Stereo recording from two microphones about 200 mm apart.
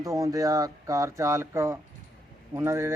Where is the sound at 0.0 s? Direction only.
15° right (ahead or behind).